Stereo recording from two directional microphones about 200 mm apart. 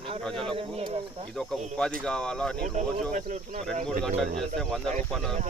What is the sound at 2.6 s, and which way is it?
Speech, 35° right (ahead or behind).